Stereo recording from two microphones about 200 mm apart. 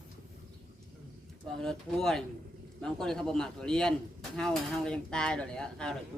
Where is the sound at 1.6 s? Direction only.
5° left (ahead or behind).